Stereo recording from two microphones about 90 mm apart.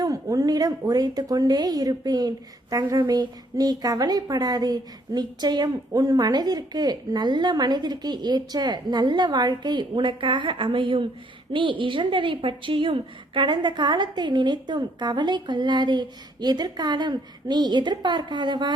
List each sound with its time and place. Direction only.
0.0 s a woman's voice: 40° right (ahead or behind); by 18.7 s 55° right (ahead or behind)